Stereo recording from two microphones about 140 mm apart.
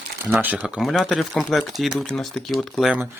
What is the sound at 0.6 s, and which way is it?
Speech, centre (ahead or behind).